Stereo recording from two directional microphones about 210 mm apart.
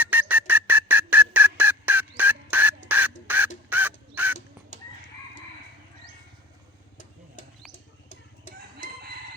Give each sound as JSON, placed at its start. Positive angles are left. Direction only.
{"t": 0.0, "sound": "music", "side_deg": -10}
{"t": 2.9, "sound": "a sound", "side_deg": -10}
{"t": 3.7, "sound": "crow", "side_deg": -10}
{"t": 8.5, "sound": "chicken", "side_deg": 40}